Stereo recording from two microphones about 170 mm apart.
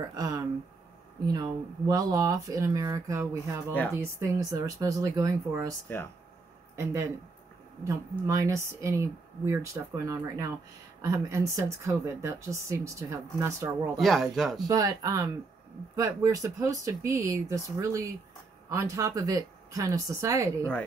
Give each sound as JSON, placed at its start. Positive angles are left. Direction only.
{"t": 0.1, "sound": "speech", "side_deg": -20}
{"t": 6.8, "sound": "speech", "side_deg": -15}
{"t": 13.9, "sound": "speech", "side_deg": 0}
{"t": 14.7, "sound": "speech", "side_deg": -20}